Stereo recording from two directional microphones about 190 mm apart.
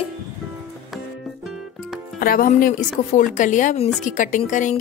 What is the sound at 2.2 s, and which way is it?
Speech, 50° left (ahead or behind).